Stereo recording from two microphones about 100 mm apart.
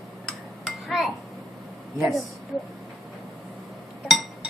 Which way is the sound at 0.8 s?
Centre (ahead or behind).